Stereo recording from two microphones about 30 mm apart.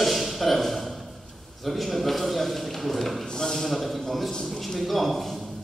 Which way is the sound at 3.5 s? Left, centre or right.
Centre.